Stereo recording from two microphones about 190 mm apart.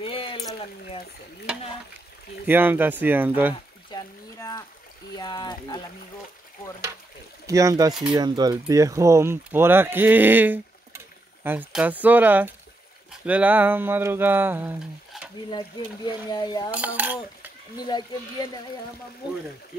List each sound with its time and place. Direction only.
0.0 s a sound: 25° left (ahead or behind)
2.4 s speech: 10° right (ahead or behind)
3.9 s a sound: 20° left (ahead or behind)
5.1 s speech: 20° left (ahead or behind)
7.4 s speech: 15° right (ahead or behind)
7.9 s speech: 5° right (ahead or behind)
8.2 s speech: 20° right (ahead or behind)
16.3 s speech: 20° left (ahead or behind)
16.7 s speech: 10° right (ahead or behind)
17.7 s speech: 20° left (ahead or behind)